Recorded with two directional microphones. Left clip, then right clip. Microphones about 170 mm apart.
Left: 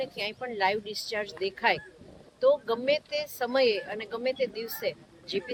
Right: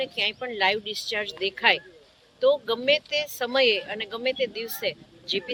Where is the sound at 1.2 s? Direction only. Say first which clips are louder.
Right 4 dB; 40° left (ahead or behind).